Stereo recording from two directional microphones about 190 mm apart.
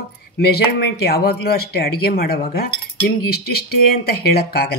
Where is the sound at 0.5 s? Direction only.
55° left (ahead or behind).